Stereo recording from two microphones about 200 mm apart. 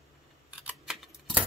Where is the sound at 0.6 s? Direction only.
Centre (ahead or behind).